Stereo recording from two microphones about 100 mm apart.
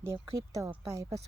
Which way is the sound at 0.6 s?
30° right (ahead or behind).